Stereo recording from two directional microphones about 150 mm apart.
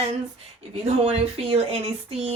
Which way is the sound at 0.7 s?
40° right (ahead or behind).